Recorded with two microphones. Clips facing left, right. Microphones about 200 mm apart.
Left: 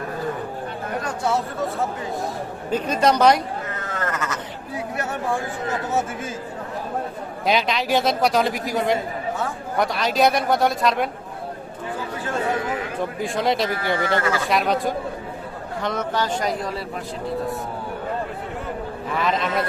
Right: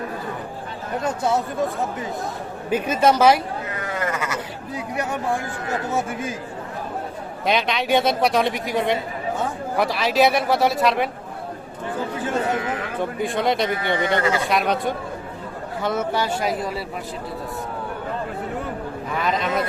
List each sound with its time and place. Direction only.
1.0 s speech: 20° right (ahead or behind)
2.6 s sheep: 10° right (ahead or behind)
4.9 s speech: 15° right (ahead or behind)
7.4 s a man's voice: centre (ahead or behind)
13.1 s a man's voice: centre (ahead or behind)
13.9 s speech: 20° right (ahead or behind)
14.4 s a man's voice: centre (ahead or behind)
19.2 s a man's voice: centre (ahead or behind)